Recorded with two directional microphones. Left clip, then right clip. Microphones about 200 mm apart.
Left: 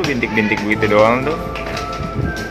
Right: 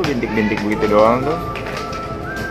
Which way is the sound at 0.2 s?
Centre (ahead or behind).